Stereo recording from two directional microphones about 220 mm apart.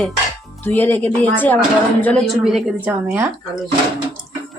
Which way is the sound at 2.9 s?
10° right (ahead or behind).